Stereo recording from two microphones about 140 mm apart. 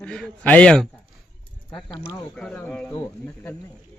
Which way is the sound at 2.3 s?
10° left (ahead or behind).